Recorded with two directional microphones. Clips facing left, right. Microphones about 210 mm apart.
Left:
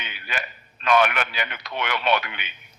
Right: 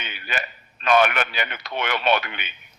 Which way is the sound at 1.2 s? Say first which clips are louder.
Right 2 dB; 30° right (ahead or behind).